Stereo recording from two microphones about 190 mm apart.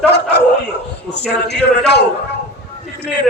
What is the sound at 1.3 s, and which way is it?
Speech, 60° left (ahead or behind).